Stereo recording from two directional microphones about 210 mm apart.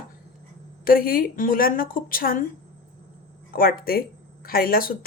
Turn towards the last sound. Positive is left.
turn(degrees=45)  # may be behind; listen again after turning